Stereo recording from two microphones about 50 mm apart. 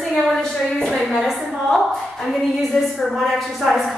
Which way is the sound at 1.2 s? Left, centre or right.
Centre.